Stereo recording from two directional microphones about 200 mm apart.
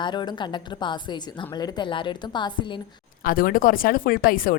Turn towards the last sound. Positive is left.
turn(degrees=45)  # may be behind; listen again after turning